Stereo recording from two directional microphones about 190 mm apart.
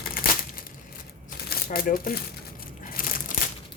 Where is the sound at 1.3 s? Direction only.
50° left (ahead or behind).